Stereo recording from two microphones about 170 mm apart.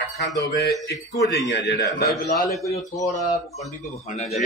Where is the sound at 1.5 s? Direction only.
85° left.